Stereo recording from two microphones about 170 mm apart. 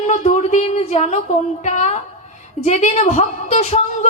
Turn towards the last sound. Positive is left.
turn(degrees=40)  # may be behind; listen again after turning